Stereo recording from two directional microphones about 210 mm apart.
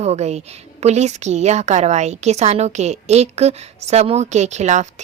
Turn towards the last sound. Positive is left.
turn(degrees=-35)  # may be behind; listen again after turning